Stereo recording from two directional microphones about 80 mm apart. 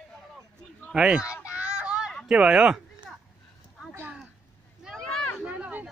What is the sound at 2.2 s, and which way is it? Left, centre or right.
Speech, centre.